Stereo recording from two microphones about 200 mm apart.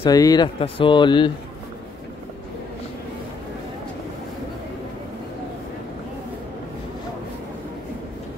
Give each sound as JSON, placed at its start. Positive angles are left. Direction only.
{"t": 0.0, "sound": "speech", "side_deg": 20}